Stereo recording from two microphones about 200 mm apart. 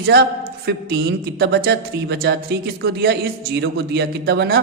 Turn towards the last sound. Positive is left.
turn(degrees=-55)  # may be behind; listen again after turning